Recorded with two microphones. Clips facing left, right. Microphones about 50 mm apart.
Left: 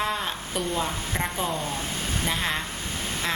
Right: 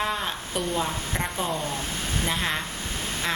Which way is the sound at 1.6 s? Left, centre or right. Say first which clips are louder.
Even; left.